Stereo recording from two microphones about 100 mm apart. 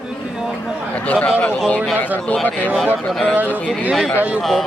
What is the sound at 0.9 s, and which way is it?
Speech, 10° left (ahead or behind).